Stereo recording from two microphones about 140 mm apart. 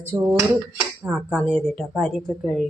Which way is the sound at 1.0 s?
5° right (ahead or behind).